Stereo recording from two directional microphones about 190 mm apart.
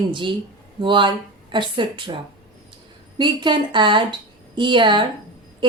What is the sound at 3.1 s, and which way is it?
A woman's voice, 25° right (ahead or behind).